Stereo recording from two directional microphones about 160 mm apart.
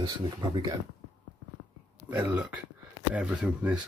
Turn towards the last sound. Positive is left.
turn(degrees=-10)  # may be behind; listen again after turning